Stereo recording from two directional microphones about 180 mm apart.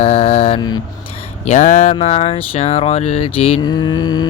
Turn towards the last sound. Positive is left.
turn(degrees=25)  # may be behind; listen again after turning